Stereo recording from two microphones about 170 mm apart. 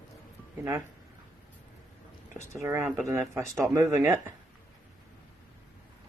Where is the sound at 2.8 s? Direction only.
Centre (ahead or behind).